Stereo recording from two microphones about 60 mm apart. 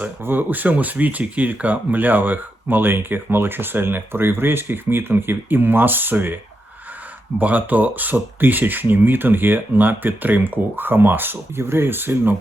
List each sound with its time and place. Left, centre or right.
0.0 s speech: right
7.3 s speech: right